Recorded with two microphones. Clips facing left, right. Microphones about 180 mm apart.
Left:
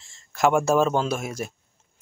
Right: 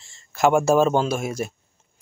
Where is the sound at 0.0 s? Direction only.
Centre (ahead or behind).